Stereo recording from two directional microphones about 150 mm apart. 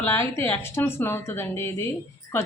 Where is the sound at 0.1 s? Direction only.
15° left (ahead or behind).